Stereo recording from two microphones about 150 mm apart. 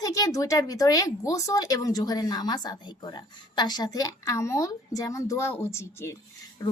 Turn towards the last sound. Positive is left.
turn(degrees=20)  # may be behind; listen again after turning